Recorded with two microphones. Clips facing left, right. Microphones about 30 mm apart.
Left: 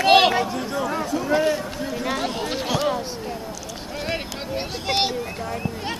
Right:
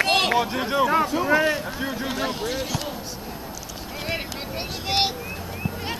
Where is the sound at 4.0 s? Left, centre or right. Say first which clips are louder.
Left 1 dB; centre.